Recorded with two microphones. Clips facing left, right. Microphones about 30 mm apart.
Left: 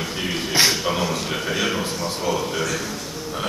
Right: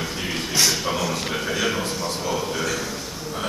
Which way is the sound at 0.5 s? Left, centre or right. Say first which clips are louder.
Left 3 dB; left.